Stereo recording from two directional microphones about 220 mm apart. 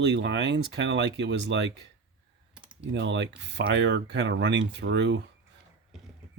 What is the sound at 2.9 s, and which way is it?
Speech, 55° right (ahead or behind).